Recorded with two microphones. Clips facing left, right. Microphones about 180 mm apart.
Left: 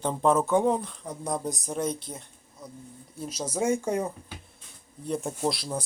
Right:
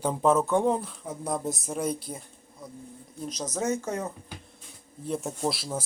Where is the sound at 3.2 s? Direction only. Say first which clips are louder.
Left 2 dB; 10° left (ahead or behind).